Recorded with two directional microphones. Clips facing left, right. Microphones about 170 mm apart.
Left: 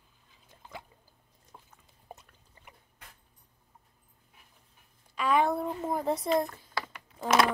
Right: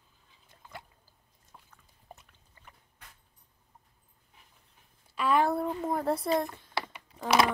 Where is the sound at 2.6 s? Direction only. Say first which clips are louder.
Left 1 dB; 25° left (ahead or behind).